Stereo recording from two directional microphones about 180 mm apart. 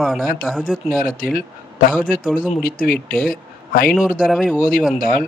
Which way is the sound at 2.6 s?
55° left (ahead or behind).